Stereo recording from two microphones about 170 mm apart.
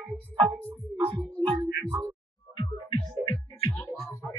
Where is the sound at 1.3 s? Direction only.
30° right (ahead or behind).